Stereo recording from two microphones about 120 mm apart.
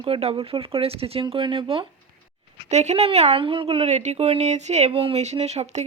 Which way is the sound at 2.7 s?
70° right (ahead or behind).